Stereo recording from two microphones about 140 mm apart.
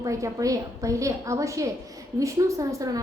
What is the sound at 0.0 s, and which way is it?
A woman's voice, 25° right (ahead or behind).